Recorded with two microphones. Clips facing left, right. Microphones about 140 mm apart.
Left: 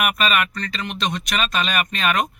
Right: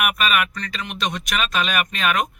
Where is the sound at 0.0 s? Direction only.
5° right (ahead or behind).